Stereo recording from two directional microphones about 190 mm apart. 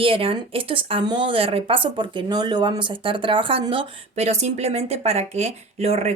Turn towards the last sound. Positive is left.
turn(degrees=-35)  # may be behind; listen again after turning